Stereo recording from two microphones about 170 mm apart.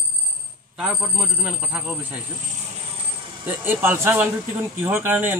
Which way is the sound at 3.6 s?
10° right (ahead or behind).